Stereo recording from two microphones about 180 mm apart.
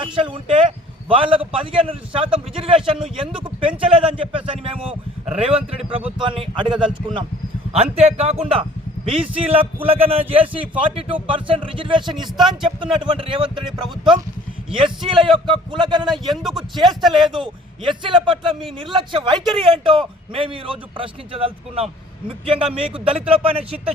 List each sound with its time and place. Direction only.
0.0 s a man's voice: 30° right (ahead or behind)
6.1 s a man's voice: 30° right (ahead or behind)
16.4 s speech: centre (ahead or behind)
17.4 s a man's voice: 25° right (ahead or behind)